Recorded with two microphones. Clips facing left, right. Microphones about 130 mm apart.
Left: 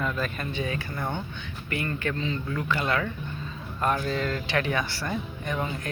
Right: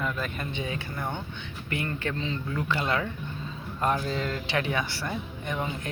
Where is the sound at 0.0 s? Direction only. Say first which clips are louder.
Left 2 dB; 15° right (ahead or behind).